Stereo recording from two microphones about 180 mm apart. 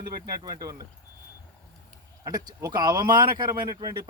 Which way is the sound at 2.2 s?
20° right (ahead or behind).